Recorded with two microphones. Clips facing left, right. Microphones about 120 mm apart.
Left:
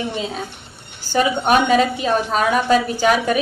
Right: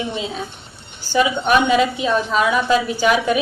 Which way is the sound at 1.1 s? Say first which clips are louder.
Even; 45° left (ahead or behind).